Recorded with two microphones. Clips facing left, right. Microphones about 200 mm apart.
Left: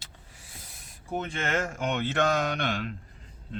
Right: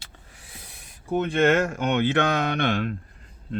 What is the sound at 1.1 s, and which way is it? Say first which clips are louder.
Speech: right 10 dB; 65° right (ahead or behind).